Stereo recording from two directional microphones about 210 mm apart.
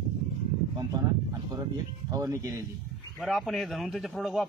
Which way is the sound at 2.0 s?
15° right (ahead or behind).